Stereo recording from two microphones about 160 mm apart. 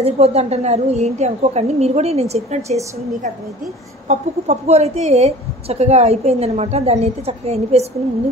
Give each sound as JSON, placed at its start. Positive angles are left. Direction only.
{"t": 0.0, "sound": "a woman's voice", "side_deg": -40}